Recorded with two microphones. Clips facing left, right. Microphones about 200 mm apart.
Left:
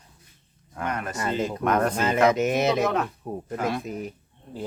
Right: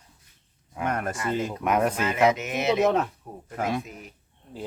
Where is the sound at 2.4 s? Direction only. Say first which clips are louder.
Left 1 dB; 40° left (ahead or behind).